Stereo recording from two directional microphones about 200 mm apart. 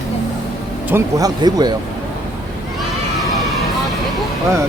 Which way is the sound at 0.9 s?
20° right (ahead or behind).